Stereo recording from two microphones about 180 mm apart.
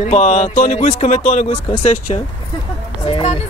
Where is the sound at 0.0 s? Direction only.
40° left (ahead or behind).